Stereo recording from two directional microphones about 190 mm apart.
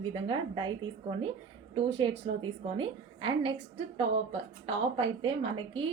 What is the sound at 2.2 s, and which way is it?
A woman's voice, 30° right (ahead or behind).